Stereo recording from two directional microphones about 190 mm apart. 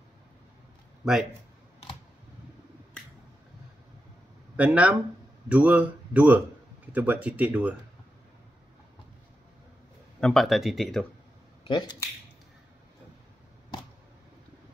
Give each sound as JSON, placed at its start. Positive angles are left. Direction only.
{"t": 4.6, "sound": "speech", "side_deg": -5}
{"t": 10.2, "sound": "speech", "side_deg": 0}
{"t": 11.6, "sound": "speech", "side_deg": 20}